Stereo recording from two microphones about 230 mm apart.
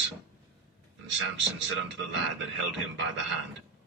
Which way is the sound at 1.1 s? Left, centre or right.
Right.